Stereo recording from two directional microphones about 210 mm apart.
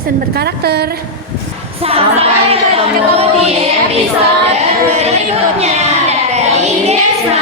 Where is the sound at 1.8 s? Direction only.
30° right (ahead or behind).